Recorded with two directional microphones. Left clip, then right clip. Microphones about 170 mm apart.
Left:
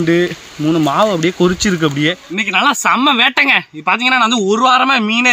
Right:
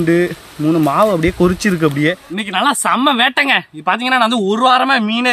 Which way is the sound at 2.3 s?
Centre (ahead or behind).